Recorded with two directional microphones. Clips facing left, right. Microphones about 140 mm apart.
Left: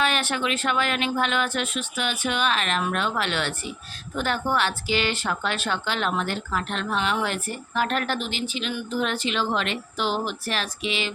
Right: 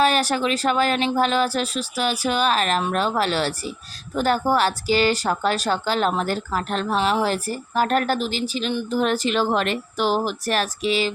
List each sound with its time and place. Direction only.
0.0 s speech: 40° right (ahead or behind)